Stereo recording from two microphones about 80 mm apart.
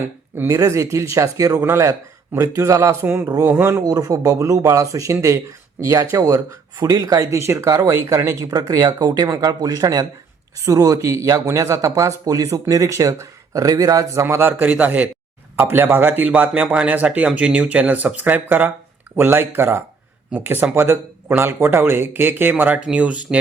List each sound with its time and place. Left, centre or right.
0.4 s speech: right
1.6 s speech: right
3.8 s speech: right
7.3 s speech: right
7.7 s speech: right
14.5 s speech: centre